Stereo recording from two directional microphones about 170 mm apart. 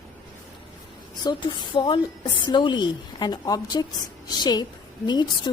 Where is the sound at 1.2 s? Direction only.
25° left (ahead or behind).